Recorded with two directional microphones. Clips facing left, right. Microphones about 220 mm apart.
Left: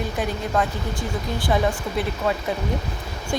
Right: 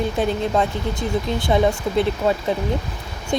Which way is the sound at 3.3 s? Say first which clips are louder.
Right 4 dB; 20° right (ahead or behind).